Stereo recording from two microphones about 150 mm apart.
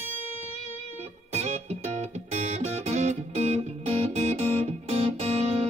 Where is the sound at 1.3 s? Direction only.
50° right (ahead or behind).